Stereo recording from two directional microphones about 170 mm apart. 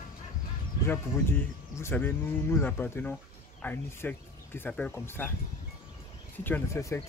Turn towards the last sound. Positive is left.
turn(degrees=15)  # may be behind; listen again after turning